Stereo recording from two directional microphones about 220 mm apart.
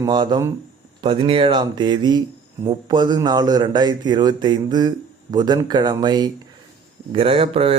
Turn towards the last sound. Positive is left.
turn(degrees=-25)  # may be behind; listen again after turning